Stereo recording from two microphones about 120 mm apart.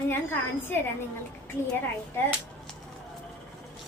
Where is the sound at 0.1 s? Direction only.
20° left (ahead or behind).